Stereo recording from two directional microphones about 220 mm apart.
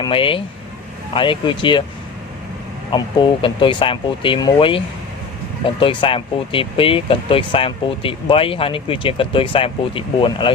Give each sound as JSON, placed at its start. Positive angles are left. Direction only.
{"t": 0.0, "sound": "speech", "side_deg": 25}
{"t": 2.9, "sound": "speech", "side_deg": 20}